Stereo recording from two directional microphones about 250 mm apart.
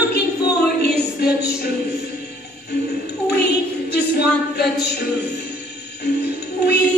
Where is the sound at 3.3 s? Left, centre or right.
Left.